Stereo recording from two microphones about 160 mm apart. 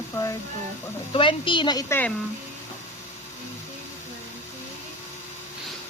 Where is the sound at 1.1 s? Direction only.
30° left (ahead or behind).